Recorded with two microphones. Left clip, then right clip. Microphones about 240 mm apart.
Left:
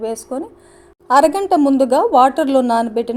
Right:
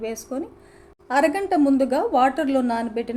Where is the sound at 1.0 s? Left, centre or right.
Left.